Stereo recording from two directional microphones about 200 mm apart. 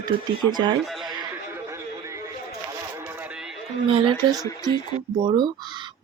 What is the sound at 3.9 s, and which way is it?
Speech, 25° right (ahead or behind).